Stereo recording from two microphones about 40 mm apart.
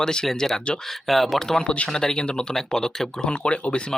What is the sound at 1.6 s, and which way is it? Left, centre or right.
Speech, left.